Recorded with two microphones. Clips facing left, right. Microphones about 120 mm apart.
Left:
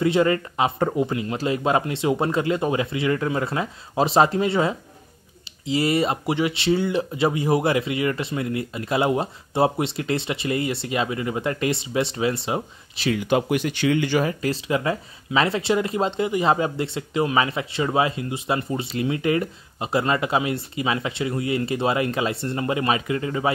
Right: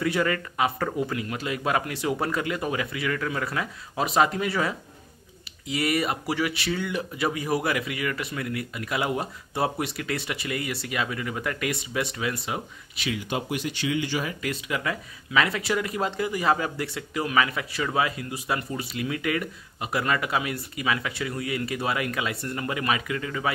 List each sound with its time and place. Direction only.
0.0 s speech: 25° left (ahead or behind)
13.3 s speech: 60° left (ahead or behind)
14.4 s speech: 30° left (ahead or behind)